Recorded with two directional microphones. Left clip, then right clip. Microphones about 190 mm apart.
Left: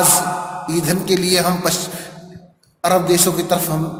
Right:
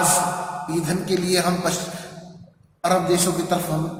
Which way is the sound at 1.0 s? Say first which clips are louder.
Left 5 dB; 45° left (ahead or behind).